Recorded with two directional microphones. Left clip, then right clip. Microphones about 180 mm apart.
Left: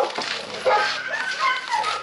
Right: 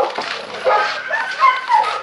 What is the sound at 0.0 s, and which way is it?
Dog, 10° left (ahead or behind).